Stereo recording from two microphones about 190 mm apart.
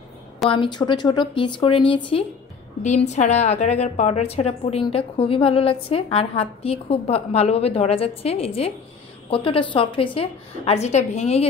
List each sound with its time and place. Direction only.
0.5 s a woman's voice: 25° left (ahead or behind)
2.8 s a woman's voice: 35° left (ahead or behind)